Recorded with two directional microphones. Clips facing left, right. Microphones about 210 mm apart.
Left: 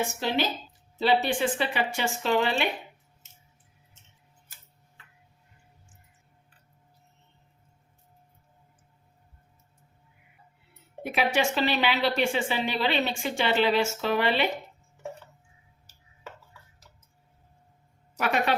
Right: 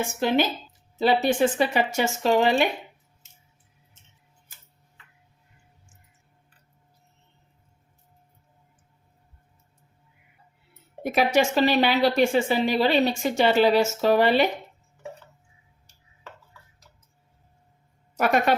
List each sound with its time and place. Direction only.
0.9 s speech: 45° right (ahead or behind)
11.0 s a woman's voice: 40° right (ahead or behind)
18.2 s speech: 45° right (ahead or behind)